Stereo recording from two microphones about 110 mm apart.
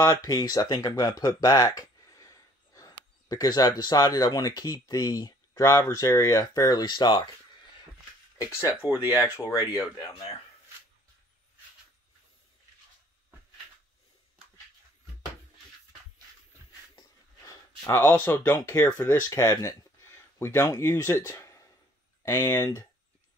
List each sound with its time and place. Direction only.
0.0 s speech: 30° left (ahead or behind)
8.4 s speech: 25° left (ahead or behind)
8.9 s speech: 15° right (ahead or behind)
9.4 s speech: 40° left (ahead or behind)
17.5 s speech: 25° left (ahead or behind)